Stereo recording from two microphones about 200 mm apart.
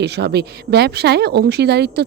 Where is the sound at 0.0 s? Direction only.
55° right (ahead or behind).